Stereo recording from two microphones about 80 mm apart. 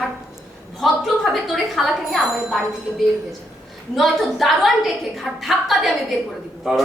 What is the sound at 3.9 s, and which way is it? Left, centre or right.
A woman's voice, centre.